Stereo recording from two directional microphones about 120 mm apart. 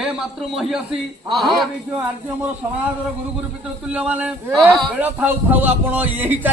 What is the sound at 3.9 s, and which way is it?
A man's voice, 10° right (ahead or behind).